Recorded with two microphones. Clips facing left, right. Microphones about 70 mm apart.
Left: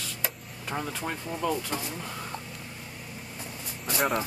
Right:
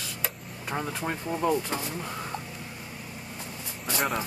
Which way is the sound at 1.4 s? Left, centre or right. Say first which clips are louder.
Right 3 dB; right.